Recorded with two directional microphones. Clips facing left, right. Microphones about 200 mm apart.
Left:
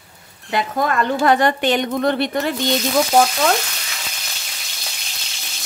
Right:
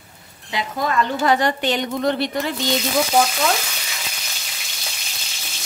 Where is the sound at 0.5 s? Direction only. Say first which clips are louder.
Left 4 dB; 55° left (ahead or behind).